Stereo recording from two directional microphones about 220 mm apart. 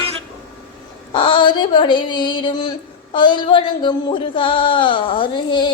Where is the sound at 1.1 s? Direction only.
20° left (ahead or behind).